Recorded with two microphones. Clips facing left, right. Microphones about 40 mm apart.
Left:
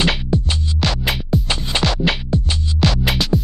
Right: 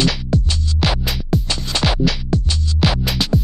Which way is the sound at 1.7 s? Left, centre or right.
Left.